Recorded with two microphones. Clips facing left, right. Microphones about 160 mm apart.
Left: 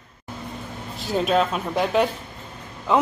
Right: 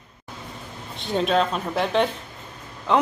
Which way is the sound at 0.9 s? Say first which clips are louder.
Left 1 dB; 5° left (ahead or behind).